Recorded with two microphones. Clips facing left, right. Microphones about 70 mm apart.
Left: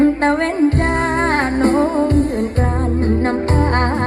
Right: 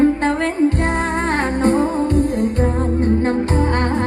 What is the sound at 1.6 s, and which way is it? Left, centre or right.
Music, left.